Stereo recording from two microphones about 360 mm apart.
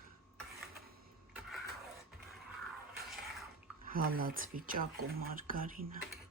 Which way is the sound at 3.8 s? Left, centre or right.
Right.